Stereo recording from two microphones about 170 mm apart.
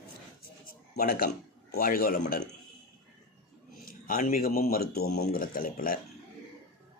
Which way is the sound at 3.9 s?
55° left (ahead or behind).